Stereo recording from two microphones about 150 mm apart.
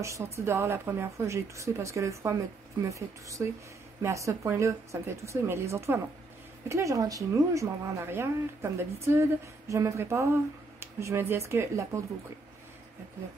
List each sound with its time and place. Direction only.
0.0 s a woman's voice: 20° right (ahead or behind)